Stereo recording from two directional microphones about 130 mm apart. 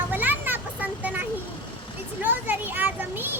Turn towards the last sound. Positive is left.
turn(degrees=-15)  # may be behind; listen again after turning